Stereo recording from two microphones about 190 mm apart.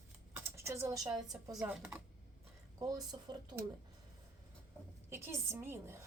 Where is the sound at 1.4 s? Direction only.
20° right (ahead or behind).